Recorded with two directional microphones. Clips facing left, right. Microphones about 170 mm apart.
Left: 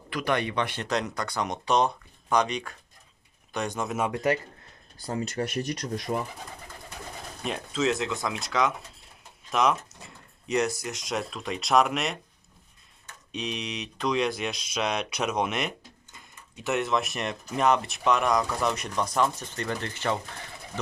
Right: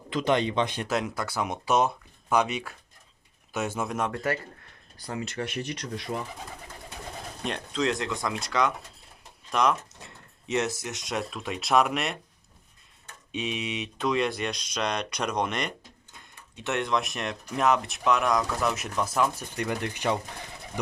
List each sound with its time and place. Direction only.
0.1 s speech: 20° right (ahead or behind)
0.9 s speech: 5° right (ahead or behind)
4.1 s speech: 20° left (ahead or behind)
5.0 s speech: 35° left (ahead or behind)
7.4 s speech: centre (ahead or behind)
13.3 s speech: centre (ahead or behind)